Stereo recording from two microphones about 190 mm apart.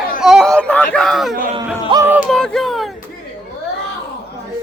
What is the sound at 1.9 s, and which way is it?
Speech, 15° right (ahead or behind).